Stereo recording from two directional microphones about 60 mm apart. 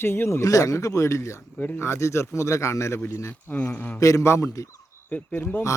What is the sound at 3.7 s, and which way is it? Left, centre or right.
Speech, left.